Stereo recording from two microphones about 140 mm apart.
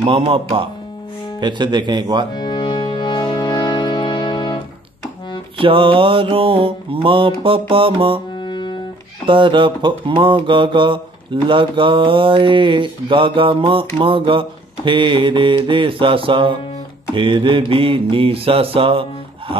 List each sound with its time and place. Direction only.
0.0 s speech: 45° right (ahead or behind)
1.4 s speech: 30° right (ahead or behind)
2.3 s music: 35° left (ahead or behind)
5.6 s speech: 40° right (ahead or behind)
8.4 s music: 35° left (ahead or behind)
9.2 s speech: 35° right (ahead or behind)